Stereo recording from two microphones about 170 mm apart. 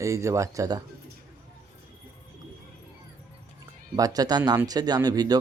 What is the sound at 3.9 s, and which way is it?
Speech, 20° right (ahead or behind).